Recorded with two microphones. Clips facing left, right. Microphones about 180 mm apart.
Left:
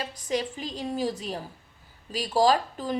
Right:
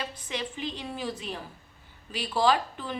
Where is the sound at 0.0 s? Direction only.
40° left (ahead or behind).